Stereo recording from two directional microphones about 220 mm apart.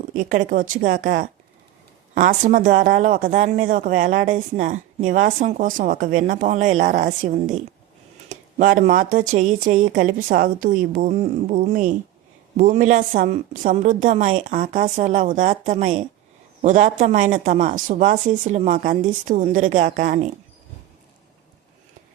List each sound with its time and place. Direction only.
0.1 s speech: 35° right (ahead or behind)